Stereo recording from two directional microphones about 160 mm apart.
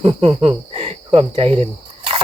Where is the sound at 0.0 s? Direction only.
35° right (ahead or behind).